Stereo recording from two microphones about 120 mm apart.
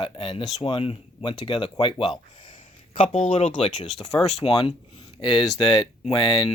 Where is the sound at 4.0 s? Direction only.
5° left (ahead or behind).